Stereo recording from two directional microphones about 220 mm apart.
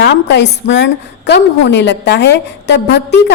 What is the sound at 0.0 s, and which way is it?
A woman's voice, 50° left (ahead or behind).